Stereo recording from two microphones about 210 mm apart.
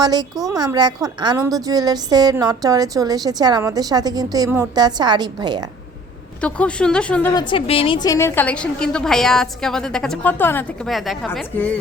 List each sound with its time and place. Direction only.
0.0 s speech: 20° right (ahead or behind)
6.4 s a woman's voice: 5° left (ahead or behind)
7.3 s a woman's voice: 25° left (ahead or behind); by 11.3 s centre (ahead or behind)